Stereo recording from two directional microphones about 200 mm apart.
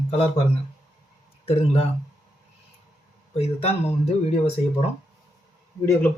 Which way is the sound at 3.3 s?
30° left (ahead or behind).